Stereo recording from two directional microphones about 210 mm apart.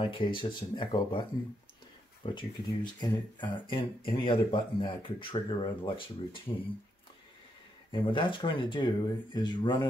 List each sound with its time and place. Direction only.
0.0 s speech: 25° left (ahead or behind)
2.2 s speech: 20° left (ahead or behind)
7.9 s speech: 25° left (ahead or behind)